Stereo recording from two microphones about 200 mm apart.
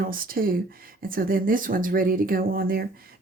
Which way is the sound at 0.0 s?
45° right (ahead or behind).